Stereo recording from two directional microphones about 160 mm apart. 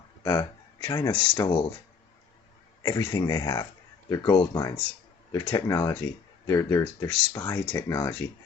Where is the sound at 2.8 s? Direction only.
25° left (ahead or behind).